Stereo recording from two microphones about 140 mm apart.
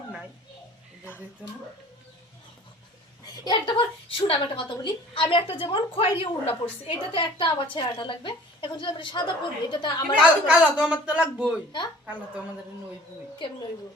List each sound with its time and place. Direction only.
3.4 s a woman's voice: 35° left (ahead or behind)
10.2 s speech: 5° right (ahead or behind)